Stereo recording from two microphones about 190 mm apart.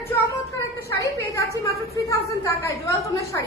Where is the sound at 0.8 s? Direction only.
15° left (ahead or behind).